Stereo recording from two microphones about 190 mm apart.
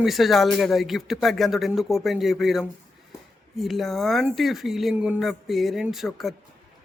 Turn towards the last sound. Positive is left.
turn(degrees=0)  # may be behind; listen again after turning